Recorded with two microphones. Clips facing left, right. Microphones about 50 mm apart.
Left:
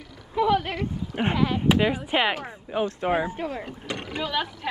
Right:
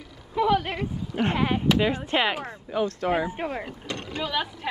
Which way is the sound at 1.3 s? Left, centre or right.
Right.